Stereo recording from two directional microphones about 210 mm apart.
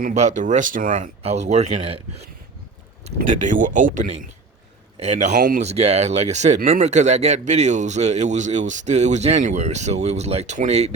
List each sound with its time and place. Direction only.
0.0 s speech: 35° right (ahead or behind)
3.2 s speech: 40° right (ahead or behind)